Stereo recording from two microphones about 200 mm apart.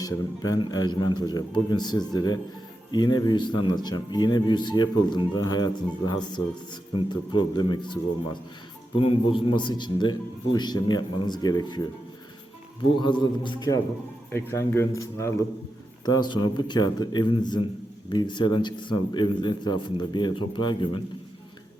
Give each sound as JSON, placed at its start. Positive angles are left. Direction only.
{"t": 0.0, "sound": "speech", "side_deg": 20}
{"t": 13.0, "sound": "speech", "side_deg": 25}
{"t": 14.3, "sound": "speech", "side_deg": 10}